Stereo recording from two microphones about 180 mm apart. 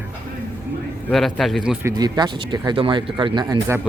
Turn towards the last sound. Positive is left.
turn(degrees=-20)  # may be behind; listen again after turning